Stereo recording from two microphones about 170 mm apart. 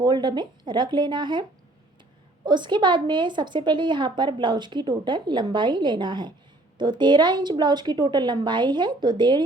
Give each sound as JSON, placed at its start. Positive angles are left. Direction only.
{"t": 0.0, "sound": "a woman's voice", "side_deg": -25}